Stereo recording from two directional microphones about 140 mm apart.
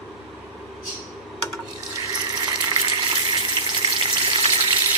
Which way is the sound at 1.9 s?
25° right (ahead or behind).